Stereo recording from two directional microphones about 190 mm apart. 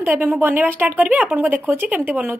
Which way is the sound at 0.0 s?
10° right (ahead or behind).